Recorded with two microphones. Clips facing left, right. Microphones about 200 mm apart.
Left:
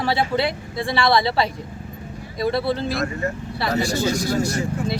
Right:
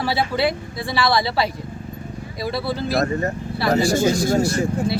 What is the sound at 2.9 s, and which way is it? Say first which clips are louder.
Speech: right 4 dB; 40° right (ahead or behind).